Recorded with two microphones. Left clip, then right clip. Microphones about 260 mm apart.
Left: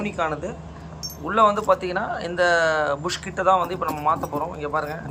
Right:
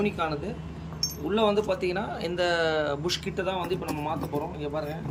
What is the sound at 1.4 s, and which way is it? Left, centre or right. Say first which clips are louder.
Speech: left 8 dB; centre.